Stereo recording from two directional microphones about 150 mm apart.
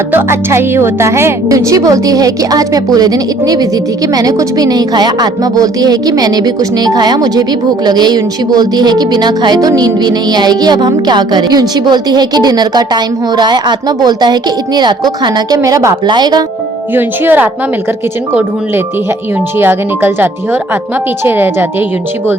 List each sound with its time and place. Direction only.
0.1 s a woman's voice: 15° right (ahead or behind)
16.9 s speech: 15° right (ahead or behind)
19.5 s speech: 15° right (ahead or behind)